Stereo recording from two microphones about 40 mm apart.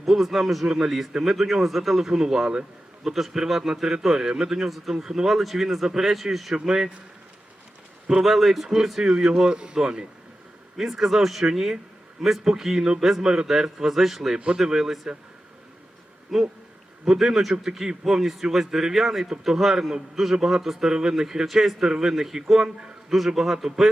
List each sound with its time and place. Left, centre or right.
0.0 s a man's voice: centre
8.2 s speech: centre
8.6 s a man's voice: centre
10.8 s a man's voice: centre
14.3 s a man's voice: centre
16.3 s a man's voice: centre